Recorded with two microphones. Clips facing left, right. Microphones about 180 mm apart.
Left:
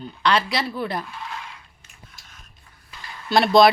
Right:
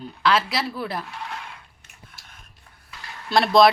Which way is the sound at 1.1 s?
65° right (ahead or behind).